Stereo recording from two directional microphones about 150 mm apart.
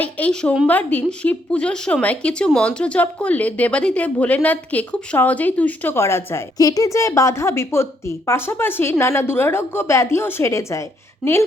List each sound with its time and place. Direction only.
0.0 s speech: 10° left (ahead or behind)
11.2 s speech: centre (ahead or behind)